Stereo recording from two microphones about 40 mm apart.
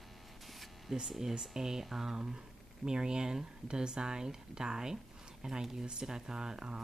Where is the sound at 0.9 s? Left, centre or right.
Centre.